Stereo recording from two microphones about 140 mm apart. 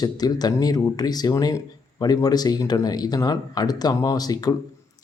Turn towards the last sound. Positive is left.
turn(degrees=25)  # may be behind; listen again after turning